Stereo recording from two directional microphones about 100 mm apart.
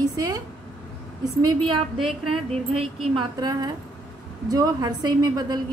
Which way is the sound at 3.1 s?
40° right (ahead or behind).